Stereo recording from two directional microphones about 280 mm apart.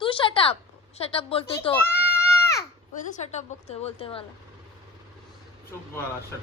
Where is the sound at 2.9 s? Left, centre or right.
Left.